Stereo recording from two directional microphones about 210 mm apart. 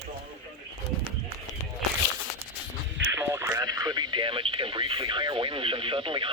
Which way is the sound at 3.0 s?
15° right (ahead or behind).